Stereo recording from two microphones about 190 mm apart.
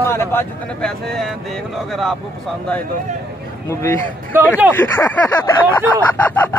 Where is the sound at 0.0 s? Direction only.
10° left (ahead or behind).